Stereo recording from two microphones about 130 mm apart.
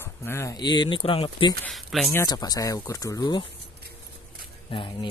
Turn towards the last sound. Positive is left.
turn(degrees=40)  # may be behind; listen again after turning